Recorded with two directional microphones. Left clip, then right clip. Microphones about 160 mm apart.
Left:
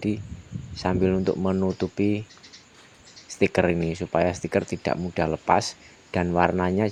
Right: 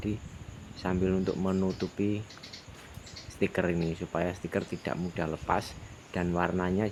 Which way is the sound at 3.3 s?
35° left (ahead or behind).